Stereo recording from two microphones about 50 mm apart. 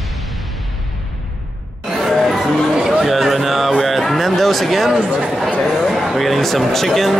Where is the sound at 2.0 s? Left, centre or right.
Centre.